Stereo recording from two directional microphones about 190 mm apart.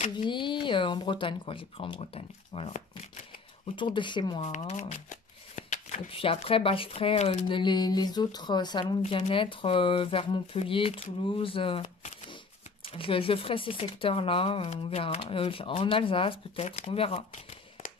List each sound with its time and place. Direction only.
0.1 s speech: 25° left (ahead or behind)
3.7 s speech: 25° left (ahead or behind)
4.4 s speech: 35° left (ahead or behind)